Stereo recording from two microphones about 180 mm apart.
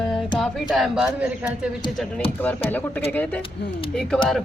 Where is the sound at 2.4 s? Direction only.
10° left (ahead or behind).